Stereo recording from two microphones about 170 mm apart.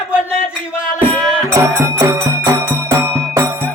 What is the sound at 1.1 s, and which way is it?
Music, 5° left (ahead or behind).